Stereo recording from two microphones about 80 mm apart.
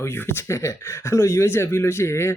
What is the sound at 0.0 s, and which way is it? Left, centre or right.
Speech, left.